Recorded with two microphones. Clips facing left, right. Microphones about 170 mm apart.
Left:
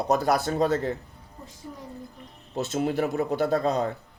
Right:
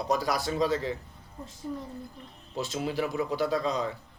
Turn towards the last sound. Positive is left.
turn(degrees=55)  # may be behind; listen again after turning